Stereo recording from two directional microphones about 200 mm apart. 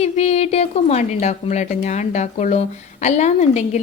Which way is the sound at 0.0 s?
30° left (ahead or behind).